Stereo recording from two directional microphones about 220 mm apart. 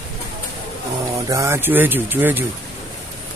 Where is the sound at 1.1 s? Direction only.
15° right (ahead or behind).